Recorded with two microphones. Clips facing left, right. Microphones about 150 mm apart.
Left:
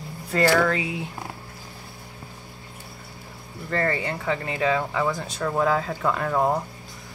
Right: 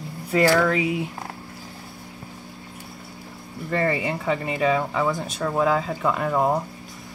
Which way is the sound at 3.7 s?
10° right (ahead or behind).